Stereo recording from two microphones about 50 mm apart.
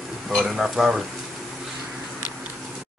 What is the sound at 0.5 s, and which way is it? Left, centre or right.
Speech, centre.